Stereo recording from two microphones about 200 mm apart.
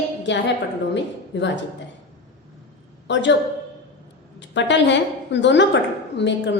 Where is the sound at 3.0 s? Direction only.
60° left (ahead or behind).